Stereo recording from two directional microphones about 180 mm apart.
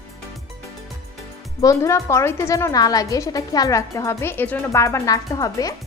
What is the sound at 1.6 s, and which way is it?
A woman's voice, 15° left (ahead or behind).